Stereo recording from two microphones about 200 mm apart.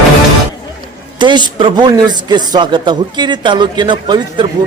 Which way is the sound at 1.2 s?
20° right (ahead or behind).